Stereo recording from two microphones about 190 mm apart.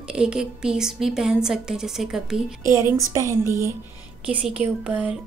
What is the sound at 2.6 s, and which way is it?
A woman's voice, 15° right (ahead or behind).